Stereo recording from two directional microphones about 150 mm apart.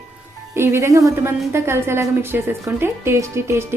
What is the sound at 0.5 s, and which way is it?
A woman's voice, 15° right (ahead or behind).